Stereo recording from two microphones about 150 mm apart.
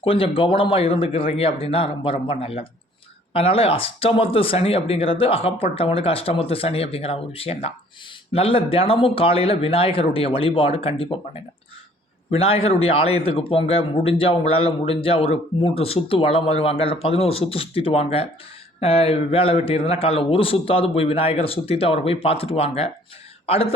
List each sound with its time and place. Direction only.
0.0 s a man's voice: 35° left (ahead or behind)
12.3 s a man's voice: 40° left (ahead or behind)